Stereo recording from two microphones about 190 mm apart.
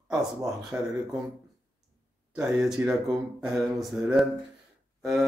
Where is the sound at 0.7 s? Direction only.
10° right (ahead or behind).